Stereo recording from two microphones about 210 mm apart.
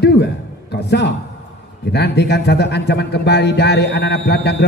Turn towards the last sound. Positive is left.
turn(degrees=50)  # may be behind; listen again after turning